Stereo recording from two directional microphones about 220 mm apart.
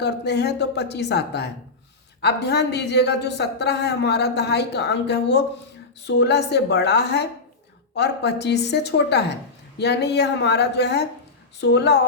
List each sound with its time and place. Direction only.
0.0 s a woman's voice: 50° left (ahead or behind)